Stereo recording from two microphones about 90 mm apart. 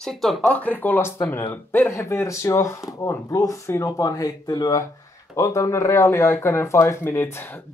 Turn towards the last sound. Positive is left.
turn(degrees=25)  # may be behind; listen again after turning